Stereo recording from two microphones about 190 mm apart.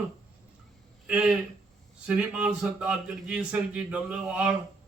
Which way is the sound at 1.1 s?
5° right (ahead or behind).